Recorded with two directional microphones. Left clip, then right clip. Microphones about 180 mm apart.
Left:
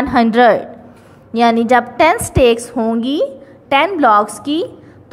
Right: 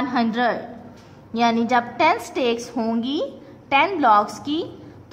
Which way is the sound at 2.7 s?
15° left (ahead or behind).